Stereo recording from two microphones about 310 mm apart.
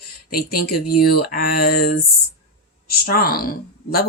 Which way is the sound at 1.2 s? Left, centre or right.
Left.